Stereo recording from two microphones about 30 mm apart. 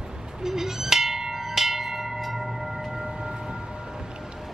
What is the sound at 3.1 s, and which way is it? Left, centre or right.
Music, right.